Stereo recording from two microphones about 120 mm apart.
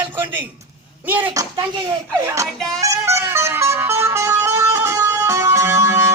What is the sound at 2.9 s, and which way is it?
Music, 25° right (ahead or behind).